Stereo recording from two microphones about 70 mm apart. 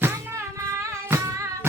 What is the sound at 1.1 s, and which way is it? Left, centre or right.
Music, right.